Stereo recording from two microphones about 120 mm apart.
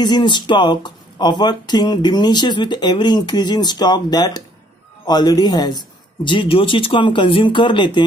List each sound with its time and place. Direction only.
0.0 s speech: 40° left (ahead or behind)
6.2 s speech: 45° left (ahead or behind)